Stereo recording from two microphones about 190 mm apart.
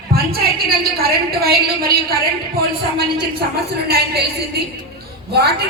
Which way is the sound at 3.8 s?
55° right (ahead or behind).